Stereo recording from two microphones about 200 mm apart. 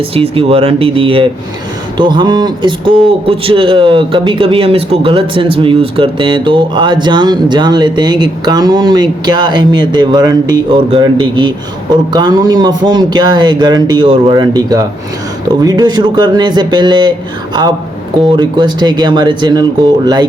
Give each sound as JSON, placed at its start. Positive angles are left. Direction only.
{"t": 0.1, "sound": "speech", "side_deg": -30}
{"t": 18.3, "sound": "speech", "side_deg": -20}